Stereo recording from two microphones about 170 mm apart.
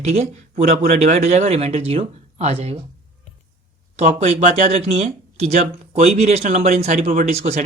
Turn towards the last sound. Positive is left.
turn(degrees=-45)  # may be behind; listen again after turning